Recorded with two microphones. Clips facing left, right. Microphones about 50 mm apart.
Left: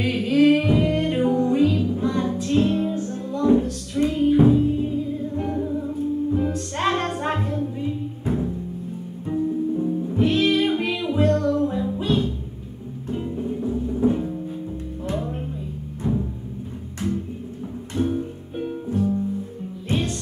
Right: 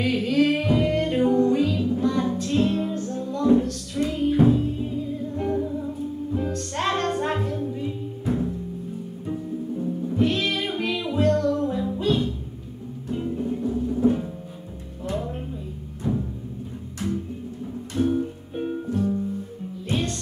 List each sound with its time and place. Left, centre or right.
0.0 s music: centre
16.0 s music: centre
18.2 s music: centre